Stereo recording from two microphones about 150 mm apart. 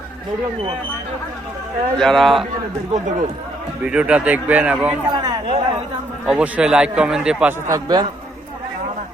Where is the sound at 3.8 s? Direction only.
5° right (ahead or behind).